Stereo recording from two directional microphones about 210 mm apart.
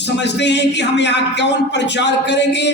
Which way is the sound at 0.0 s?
55° left (ahead or behind).